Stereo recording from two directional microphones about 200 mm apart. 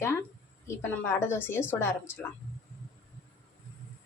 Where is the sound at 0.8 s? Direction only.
10° left (ahead or behind).